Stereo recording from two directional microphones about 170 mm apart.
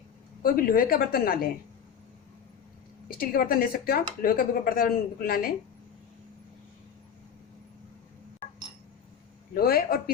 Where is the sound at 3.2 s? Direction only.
60° left (ahead or behind).